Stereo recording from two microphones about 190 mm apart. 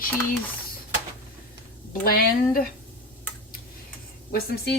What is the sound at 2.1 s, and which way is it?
Speech, 50° left (ahead or behind).